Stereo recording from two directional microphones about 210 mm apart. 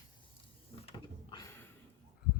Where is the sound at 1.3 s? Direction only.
15° left (ahead or behind).